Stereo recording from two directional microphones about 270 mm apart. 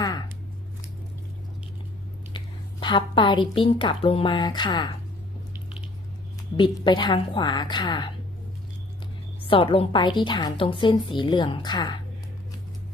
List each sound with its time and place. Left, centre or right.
2.8 s a woman's voice: centre
6.6 s a woman's voice: centre
9.5 s a woman's voice: centre